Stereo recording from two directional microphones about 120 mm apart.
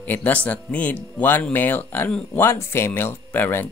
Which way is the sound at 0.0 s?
15° left (ahead or behind).